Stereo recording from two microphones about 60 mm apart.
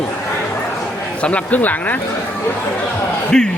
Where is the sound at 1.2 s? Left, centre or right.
Left.